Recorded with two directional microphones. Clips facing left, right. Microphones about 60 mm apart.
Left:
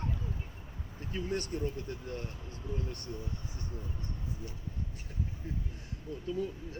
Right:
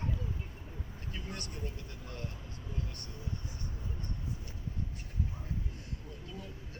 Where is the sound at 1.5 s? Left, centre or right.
Centre.